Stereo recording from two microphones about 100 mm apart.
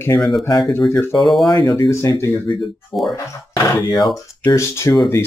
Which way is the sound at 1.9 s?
30° left (ahead or behind).